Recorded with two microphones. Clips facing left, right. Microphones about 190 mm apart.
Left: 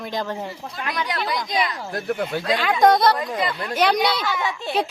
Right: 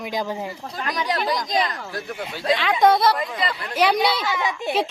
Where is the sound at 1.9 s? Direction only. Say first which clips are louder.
Left 6 dB; 55° left (ahead or behind).